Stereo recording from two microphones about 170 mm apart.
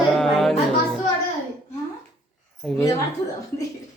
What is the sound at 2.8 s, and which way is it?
Speech, 20° left (ahead or behind).